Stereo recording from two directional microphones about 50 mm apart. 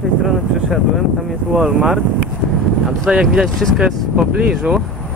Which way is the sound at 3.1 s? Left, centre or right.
Centre.